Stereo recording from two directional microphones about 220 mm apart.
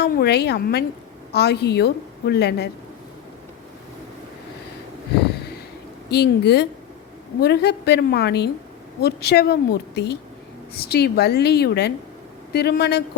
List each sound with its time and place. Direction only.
0.0 s a woman's voice: 45° left (ahead or behind)
6.1 s a woman's voice: 50° left (ahead or behind)